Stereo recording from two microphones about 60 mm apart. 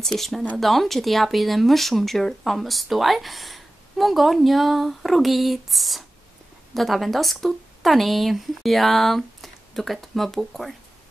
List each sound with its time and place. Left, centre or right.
0.0 s a woman's voice: centre